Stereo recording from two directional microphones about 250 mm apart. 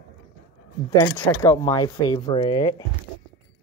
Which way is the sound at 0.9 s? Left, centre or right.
Centre.